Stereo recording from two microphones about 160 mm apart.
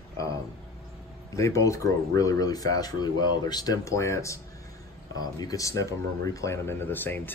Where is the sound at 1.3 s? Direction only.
20° left (ahead or behind).